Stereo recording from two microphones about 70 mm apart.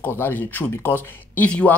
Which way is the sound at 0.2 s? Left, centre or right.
Left.